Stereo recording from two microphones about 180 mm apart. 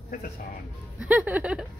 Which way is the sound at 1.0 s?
10° right (ahead or behind).